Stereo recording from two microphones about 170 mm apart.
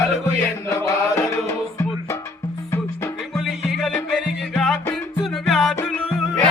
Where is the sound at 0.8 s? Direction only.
20° left (ahead or behind).